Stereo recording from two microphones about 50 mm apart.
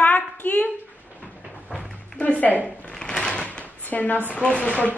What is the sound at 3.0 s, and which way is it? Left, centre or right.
Drawer open or close, centre.